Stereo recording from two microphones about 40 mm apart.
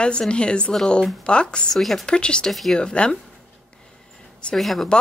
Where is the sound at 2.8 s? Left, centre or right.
Left.